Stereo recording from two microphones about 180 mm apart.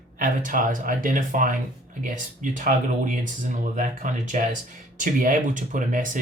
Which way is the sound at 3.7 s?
45° right (ahead or behind).